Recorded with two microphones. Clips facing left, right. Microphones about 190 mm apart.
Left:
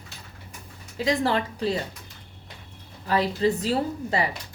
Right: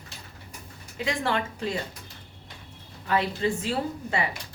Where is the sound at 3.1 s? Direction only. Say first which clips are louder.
Left 3 dB; 35° left (ahead or behind).